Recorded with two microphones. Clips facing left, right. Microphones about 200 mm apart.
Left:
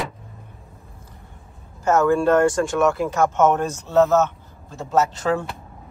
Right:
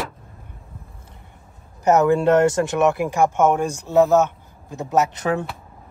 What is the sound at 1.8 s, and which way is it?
Speech, 20° right (ahead or behind).